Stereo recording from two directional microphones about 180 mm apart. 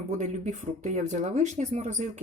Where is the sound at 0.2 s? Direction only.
40° right (ahead or behind).